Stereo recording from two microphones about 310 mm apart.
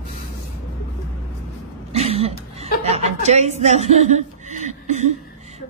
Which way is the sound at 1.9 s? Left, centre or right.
Centre.